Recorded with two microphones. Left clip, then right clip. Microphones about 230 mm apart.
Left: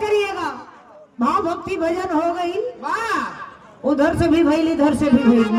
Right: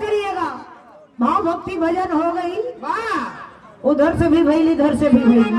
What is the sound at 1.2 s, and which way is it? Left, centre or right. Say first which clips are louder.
Speech: right 2 dB; left.